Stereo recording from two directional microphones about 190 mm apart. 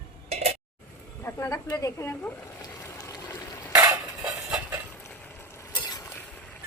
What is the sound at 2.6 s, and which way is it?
Vehicle, 20° left (ahead or behind).